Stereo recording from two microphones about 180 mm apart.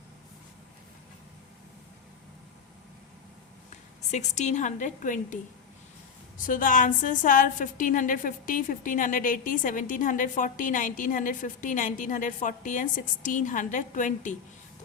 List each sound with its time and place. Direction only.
4.1 s a woman's voice: 40° left (ahead or behind)